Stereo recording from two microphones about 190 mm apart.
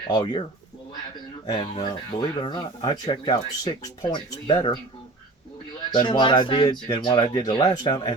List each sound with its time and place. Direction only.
0.1 s speech: 25° left (ahead or behind)
1.5 s speech: 25° left (ahead or behind)
5.9 s speech: 25° left (ahead or behind)